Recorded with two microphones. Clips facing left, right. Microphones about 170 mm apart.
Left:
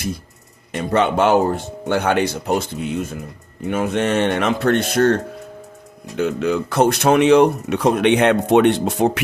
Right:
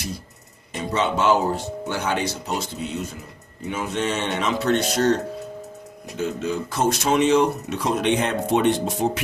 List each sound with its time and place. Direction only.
0.7 s speech: 60° left (ahead or behind)
6.1 s speech: 65° left (ahead or behind)